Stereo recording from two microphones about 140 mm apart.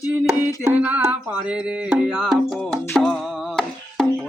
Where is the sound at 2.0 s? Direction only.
5° right (ahead or behind).